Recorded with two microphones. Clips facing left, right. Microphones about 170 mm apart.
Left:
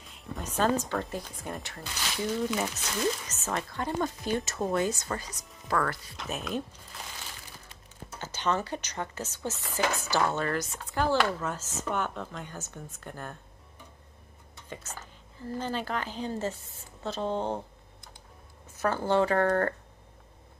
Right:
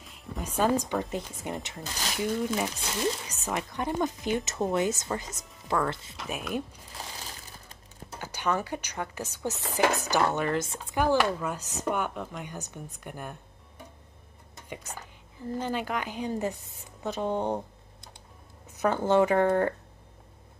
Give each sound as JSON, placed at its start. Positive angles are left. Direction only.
{"t": 0.0, "sound": "speech", "side_deg": 0}
{"t": 1.8, "sound": "speech", "side_deg": -40}
{"t": 2.1, "sound": "a woman's voice", "side_deg": -15}
{"t": 6.1, "sound": "a woman's voice", "side_deg": -5}
{"t": 8.2, "sound": "a woman's voice", "side_deg": -15}
{"t": 14.7, "sound": "a woman's voice", "side_deg": -15}
{"t": 18.8, "sound": "a woman's voice", "side_deg": -15}